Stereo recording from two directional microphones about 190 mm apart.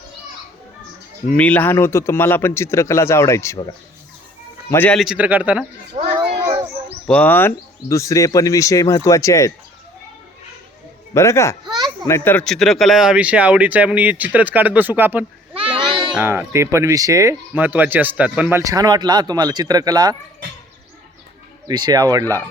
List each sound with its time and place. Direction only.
1.4 s speech: 10° left (ahead or behind)
4.7 s speech: 10° left (ahead or behind)
5.0 s speech: 5° right (ahead or behind)
7.1 s speech: 10° left (ahead or behind)
11.1 s speech: 15° left (ahead or behind)
11.6 s a sound: 25° right (ahead or behind)
12.0 s speech: 10° left (ahead or behind); by 15.2 s 10° right (ahead or behind)
15.7 s goat: 25° right (ahead or behind)
16.1 s speech: 10° right (ahead or behind)
18.6 s speech: 20° right (ahead or behind)
21.7 s speech: 20° right (ahead or behind)